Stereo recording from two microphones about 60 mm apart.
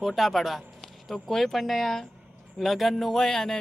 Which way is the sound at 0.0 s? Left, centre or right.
Centre.